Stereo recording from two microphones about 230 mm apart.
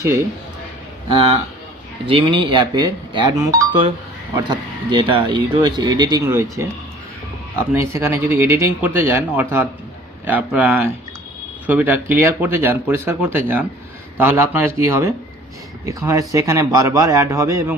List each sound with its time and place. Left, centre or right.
2.0 s speech: right
7.7 s speech: centre